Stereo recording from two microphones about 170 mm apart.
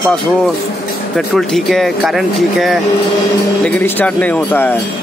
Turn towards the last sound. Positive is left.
turn(degrees=10)  # may be behind; listen again after turning